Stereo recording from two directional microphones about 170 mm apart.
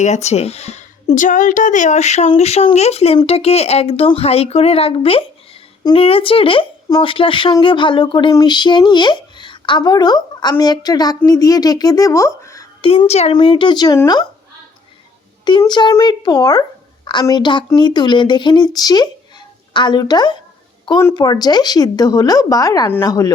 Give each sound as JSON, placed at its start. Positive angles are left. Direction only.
{"t": 0.0, "sound": "speech", "side_deg": 40}
{"t": 12.8, "sound": "speech", "side_deg": 35}
{"t": 15.4, "sound": "speech", "side_deg": 25}